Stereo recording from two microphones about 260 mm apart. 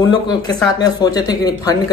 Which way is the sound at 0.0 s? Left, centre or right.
Centre.